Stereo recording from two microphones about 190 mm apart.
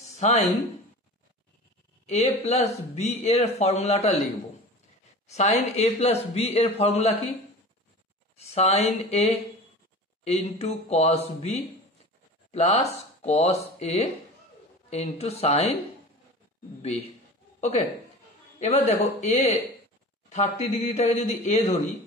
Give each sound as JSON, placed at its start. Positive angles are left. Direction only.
{"t": 0.1, "sound": "a sound", "side_deg": 35}
{"t": 2.0, "sound": "speech", "side_deg": 35}
{"t": 5.3, "sound": "speech", "side_deg": 35}
{"t": 8.4, "sound": "speech", "side_deg": 35}
{"t": 16.8, "sound": "a man's voice", "side_deg": 35}
{"t": 20.2, "sound": "speech", "side_deg": 35}